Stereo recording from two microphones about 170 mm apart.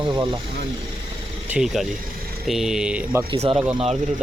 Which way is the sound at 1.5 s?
5° right (ahead or behind).